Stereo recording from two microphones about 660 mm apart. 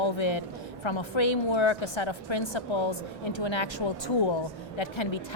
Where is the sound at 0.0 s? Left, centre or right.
Left.